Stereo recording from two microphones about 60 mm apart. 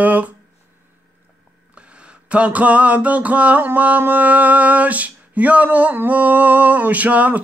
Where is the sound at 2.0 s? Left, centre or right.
Right.